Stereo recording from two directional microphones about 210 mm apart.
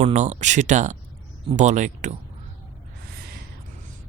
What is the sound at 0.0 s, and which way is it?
Speech, 35° right (ahead or behind).